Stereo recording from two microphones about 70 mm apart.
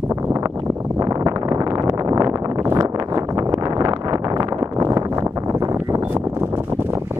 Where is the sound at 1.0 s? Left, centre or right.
Right.